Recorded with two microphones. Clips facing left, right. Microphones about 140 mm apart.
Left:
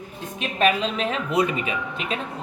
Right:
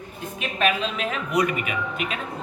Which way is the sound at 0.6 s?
35° left (ahead or behind).